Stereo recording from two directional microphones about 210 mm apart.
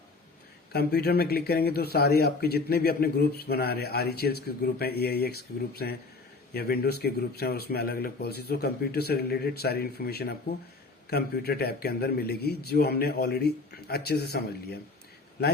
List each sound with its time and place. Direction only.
0.7 s a man's voice: 50° left (ahead or behind)